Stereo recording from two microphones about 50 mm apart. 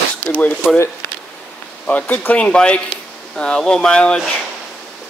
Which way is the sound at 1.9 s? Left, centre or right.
Left.